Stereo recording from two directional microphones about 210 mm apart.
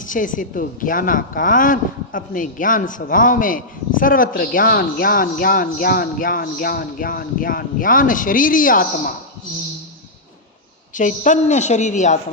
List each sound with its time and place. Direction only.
0.0 s speech: 40° left (ahead or behind)
10.9 s speech: 35° left (ahead or behind)